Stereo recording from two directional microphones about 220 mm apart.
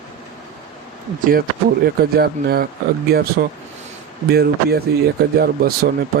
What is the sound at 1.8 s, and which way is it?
Speech, 45° right (ahead or behind).